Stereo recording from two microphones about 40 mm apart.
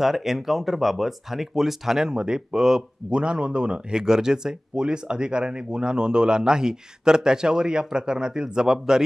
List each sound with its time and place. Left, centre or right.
0.0 s speech: centre
3.1 s speech: right